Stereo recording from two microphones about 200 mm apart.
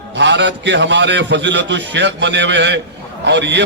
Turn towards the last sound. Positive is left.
turn(degrees=-60)  # may be behind; listen again after turning